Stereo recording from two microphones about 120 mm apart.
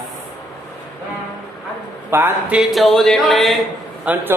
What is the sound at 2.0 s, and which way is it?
Speech, 20° right (ahead or behind).